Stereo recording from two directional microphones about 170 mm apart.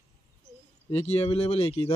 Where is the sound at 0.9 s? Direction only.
40° left (ahead or behind).